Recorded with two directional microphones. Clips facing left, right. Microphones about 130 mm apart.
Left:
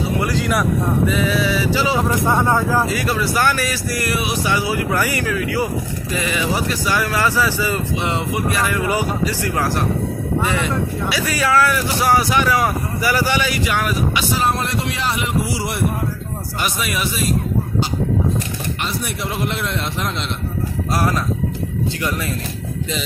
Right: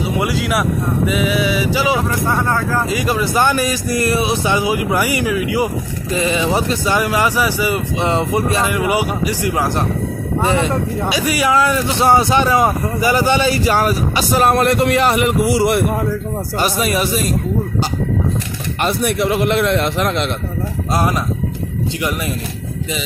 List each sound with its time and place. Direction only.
0.2 s speech: 5° right (ahead or behind)
2.2 s speech: 15° left (ahead or behind)
2.9 s speech: 20° right (ahead or behind)
6.1 s speech: 25° right (ahead or behind)
8.0 s speech: 30° right (ahead or behind); by 9.7 s 15° right (ahead or behind)
10.4 s speech: 30° right (ahead or behind)
11.1 s speech: 15° right (ahead or behind); by 14.2 s 35° right (ahead or behind)
14.3 s speech: 60° right (ahead or behind)
16.5 s speech: 35° right (ahead or behind)
18.8 s speech: 55° right (ahead or behind)
20.9 s speech: 20° right (ahead or behind)